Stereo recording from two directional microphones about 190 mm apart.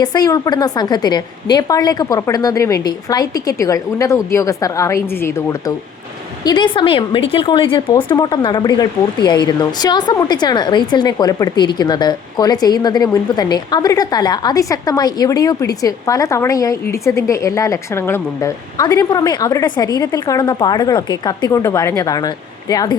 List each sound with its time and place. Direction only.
0.0 s a woman's voice: 20° left (ahead or behind)